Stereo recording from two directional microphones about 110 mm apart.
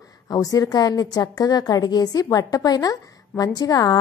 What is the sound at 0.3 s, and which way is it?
A woman's voice, 35° left (ahead or behind).